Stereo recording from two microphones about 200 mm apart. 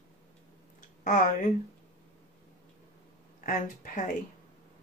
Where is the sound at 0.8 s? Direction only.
40° left (ahead or behind).